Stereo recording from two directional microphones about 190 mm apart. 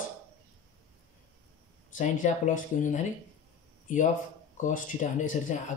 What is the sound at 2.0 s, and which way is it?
Speech, 40° left (ahead or behind).